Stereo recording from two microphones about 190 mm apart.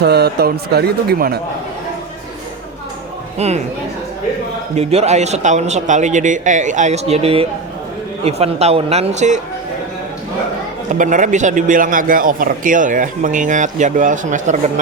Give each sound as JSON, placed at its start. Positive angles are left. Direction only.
{"t": 0.0, "sound": "speech", "side_deg": -60}
{"t": 3.3, "sound": "speech", "side_deg": -35}
{"t": 4.7, "sound": "speech", "side_deg": -35}
{"t": 10.9, "sound": "speech", "side_deg": -45}